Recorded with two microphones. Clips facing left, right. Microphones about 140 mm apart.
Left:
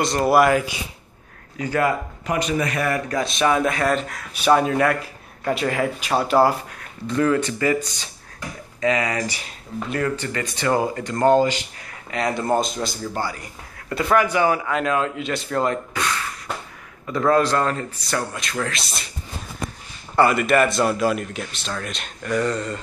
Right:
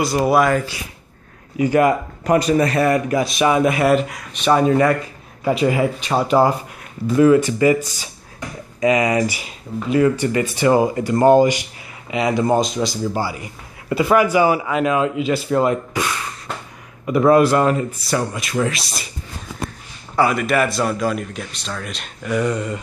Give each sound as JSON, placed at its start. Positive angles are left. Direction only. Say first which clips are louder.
{"t": 0.0, "sound": "speech", "louder": "right 1 dB", "side_deg": -5}
{"t": 1.6, "sound": "speech", "louder": "right 6 dB", "side_deg": -15}
{"t": 2.2, "sound": "speech", "louder": "right 7 dB", "side_deg": -40}
{"t": 3.1, "sound": "speech", "louder": "right 3 dB", "side_deg": -5}
{"t": 7.1, "sound": "speech", "louder": "right 7 dB", "side_deg": -10}
{"t": 20.2, "sound": "speech", "louder": "even", "side_deg": 0}